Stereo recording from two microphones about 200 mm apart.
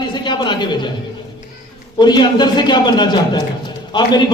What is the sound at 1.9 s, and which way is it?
Speech, 20° left (ahead or behind).